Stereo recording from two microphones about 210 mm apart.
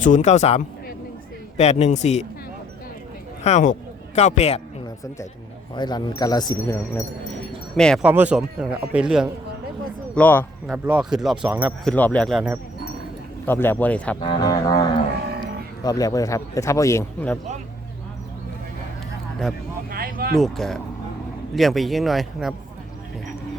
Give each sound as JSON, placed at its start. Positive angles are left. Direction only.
{"t": 0.0, "sound": "speech", "side_deg": 35}
{"t": 3.4, "sound": "speech", "side_deg": 35}
{"t": 5.7, "sound": "speech", "side_deg": 20}
{"t": 8.0, "sound": "a man's voice", "side_deg": -5}
{"t": 10.2, "sound": "speech", "side_deg": 10}
{"t": 10.7, "sound": "a man's voice", "side_deg": -5}
{"t": 11.9, "sound": "a man's voice", "side_deg": 5}
{"t": 14.2, "sound": "speech", "side_deg": 20}
{"t": 19.9, "sound": "a sound", "side_deg": -45}
{"t": 20.3, "sound": "a man's voice", "side_deg": 0}